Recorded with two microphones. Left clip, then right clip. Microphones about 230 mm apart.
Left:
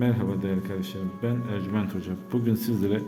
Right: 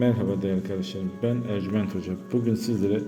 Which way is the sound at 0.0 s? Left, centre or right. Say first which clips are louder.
Right 3 dB; centre.